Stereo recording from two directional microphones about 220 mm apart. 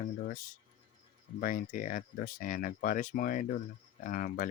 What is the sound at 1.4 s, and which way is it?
Speech, 40° left (ahead or behind).